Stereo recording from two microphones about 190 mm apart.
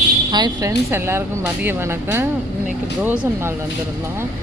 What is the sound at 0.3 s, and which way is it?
Speech, 20° right (ahead or behind).